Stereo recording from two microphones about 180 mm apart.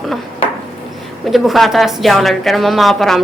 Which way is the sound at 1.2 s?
Centre (ahead or behind).